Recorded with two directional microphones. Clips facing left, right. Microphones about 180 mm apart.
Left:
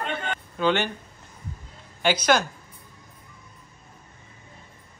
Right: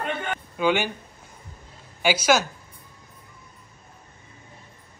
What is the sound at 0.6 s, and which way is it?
Speech, 10° right (ahead or behind).